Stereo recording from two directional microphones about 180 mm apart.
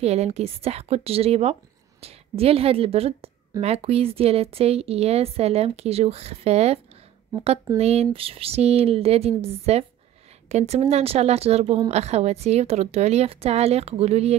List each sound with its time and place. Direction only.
0.0 s a woman's voice: 35° right (ahead or behind)